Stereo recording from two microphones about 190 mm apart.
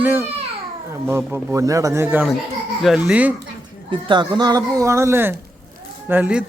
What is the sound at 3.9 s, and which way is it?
A man's voice, 25° right (ahead or behind).